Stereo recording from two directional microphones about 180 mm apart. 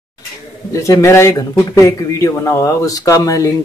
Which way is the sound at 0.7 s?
15° left (ahead or behind).